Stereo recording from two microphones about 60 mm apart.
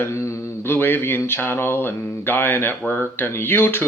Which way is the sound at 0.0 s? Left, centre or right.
Left.